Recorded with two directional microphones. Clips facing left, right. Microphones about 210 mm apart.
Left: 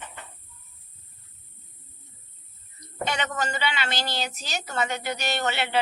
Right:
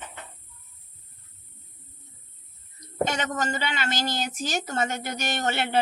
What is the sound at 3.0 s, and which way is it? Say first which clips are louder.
A woman's voice: right 1 dB; 45° right (ahead or behind).